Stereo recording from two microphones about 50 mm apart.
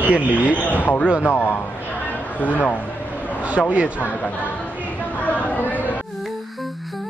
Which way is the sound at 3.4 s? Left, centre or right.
Right.